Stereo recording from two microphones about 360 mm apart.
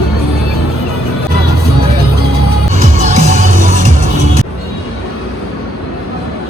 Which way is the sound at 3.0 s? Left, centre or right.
Centre.